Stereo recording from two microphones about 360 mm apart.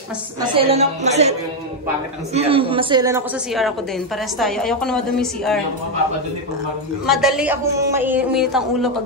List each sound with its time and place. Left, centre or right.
0.4 s speech: centre
2.3 s speech: centre
7.1 s speech: centre